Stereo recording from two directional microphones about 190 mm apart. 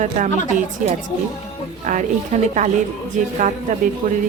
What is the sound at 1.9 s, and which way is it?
Speech, 40° right (ahead or behind).